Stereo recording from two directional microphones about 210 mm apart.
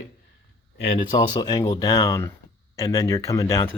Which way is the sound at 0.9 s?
20° left (ahead or behind).